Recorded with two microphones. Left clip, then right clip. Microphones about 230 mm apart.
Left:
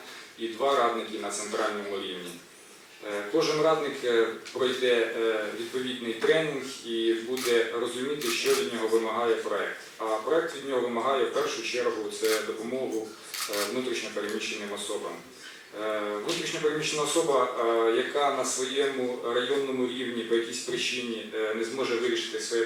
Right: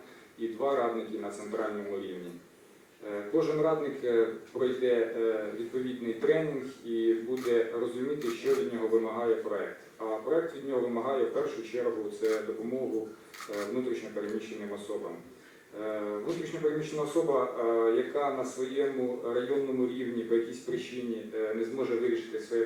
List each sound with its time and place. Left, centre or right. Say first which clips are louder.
0.4 s speech: left 4 dB; centre
14.8 s a man's voice: left 2 dB; right
15.8 s speech: left 4 dB; centre